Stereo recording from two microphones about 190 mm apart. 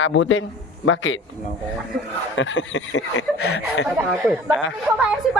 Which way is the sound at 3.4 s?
60° left (ahead or behind).